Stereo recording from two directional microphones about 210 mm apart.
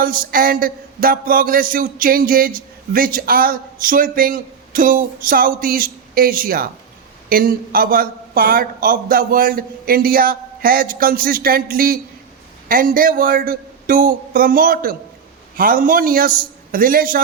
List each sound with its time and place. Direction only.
0.0 s speech: 45° right (ahead or behind)